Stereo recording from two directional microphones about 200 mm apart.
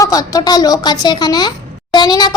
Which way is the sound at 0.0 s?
15° left (ahead or behind).